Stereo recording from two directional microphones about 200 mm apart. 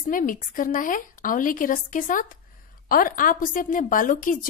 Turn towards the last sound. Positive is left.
turn(degrees=40)  # may be behind; listen again after turning